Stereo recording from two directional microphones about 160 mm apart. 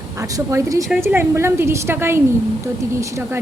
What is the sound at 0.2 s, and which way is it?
A woman's voice, 20° right (ahead or behind).